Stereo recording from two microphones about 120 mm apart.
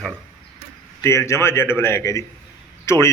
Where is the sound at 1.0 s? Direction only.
20° left (ahead or behind).